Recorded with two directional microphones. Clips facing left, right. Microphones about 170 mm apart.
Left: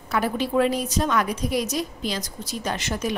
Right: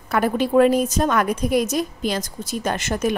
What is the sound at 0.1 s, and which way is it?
A woman's voice, 50° right (ahead or behind).